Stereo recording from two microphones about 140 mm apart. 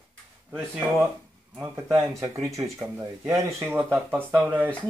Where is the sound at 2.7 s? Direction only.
5° right (ahead or behind).